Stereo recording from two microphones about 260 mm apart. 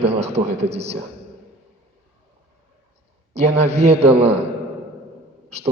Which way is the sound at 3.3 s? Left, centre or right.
Right.